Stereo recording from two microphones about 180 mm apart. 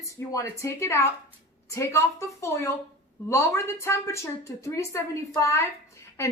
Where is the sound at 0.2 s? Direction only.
15° left (ahead or behind).